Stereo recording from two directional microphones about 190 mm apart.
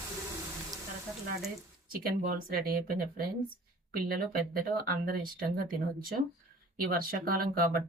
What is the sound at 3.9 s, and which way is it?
A woman's voice, 50° right (ahead or behind).